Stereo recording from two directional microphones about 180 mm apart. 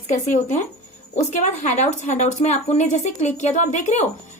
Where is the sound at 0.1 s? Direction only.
45° left (ahead or behind).